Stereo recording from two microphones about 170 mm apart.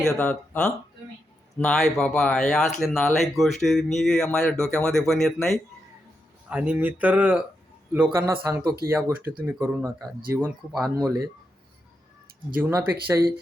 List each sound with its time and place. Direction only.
0.0 s speech: 5° left (ahead or behind); by 10.4 s 15° right (ahead or behind)
10.7 s speech: centre (ahead or behind)
10.9 s speech: 20° right (ahead or behind)
12.5 s speech: 10° right (ahead or behind)